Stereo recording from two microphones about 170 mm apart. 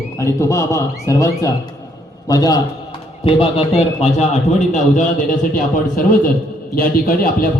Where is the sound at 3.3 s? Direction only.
35° left (ahead or behind).